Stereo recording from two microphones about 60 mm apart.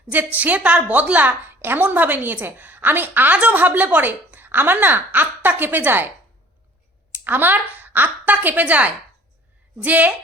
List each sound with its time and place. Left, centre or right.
0.1 s a woman's voice: right
7.3 s a woman's voice: right